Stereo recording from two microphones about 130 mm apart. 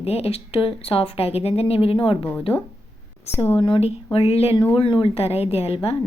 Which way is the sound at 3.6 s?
45° left (ahead or behind).